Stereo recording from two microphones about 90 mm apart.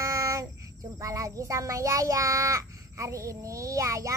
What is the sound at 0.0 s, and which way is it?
Child singing, 35° right (ahead or behind).